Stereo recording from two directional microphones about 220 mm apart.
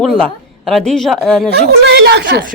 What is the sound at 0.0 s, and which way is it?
Speech, centre (ahead or behind).